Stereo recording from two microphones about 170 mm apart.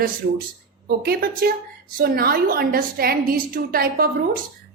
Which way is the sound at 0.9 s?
65° right (ahead or behind).